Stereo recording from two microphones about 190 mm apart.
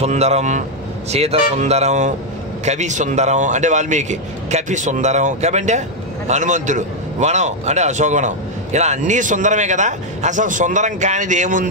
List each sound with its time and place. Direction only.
0.0 s speech: 35° right (ahead or behind)